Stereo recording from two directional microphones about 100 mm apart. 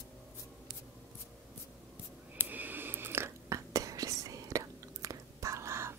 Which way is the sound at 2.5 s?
20° right (ahead or behind).